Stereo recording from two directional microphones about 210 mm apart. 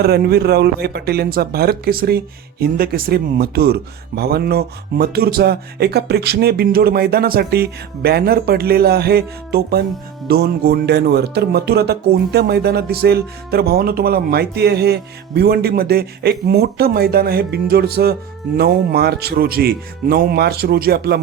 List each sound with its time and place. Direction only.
0.0 s speech: 45° right (ahead or behind)